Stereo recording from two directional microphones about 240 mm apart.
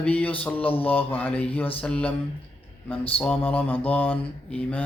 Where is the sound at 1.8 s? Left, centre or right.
Centre.